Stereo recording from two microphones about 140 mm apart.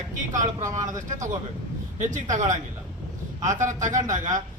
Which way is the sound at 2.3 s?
60° right (ahead or behind).